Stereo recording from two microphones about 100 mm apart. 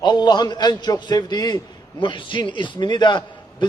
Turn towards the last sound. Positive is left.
turn(degrees=50)  # may be behind; listen again after turning